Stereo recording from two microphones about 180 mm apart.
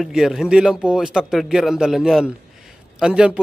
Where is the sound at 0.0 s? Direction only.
Centre (ahead or behind).